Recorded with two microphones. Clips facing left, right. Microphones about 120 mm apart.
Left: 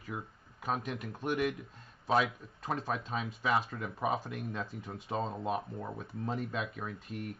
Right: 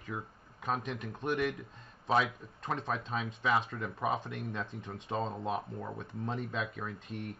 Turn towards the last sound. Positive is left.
turn(degrees=5)  # may be behind; listen again after turning